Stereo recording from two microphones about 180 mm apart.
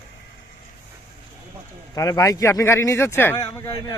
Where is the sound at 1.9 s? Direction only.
20° left (ahead or behind).